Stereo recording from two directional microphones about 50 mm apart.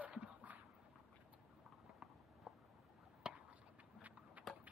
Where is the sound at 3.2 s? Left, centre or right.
Centre.